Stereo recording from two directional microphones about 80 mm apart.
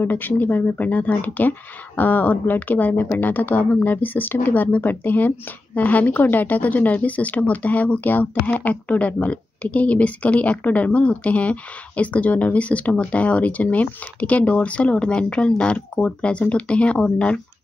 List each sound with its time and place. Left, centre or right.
0.0 s a woman's voice: left